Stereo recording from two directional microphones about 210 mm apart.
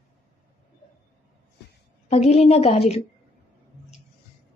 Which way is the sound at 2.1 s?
30° left (ahead or behind).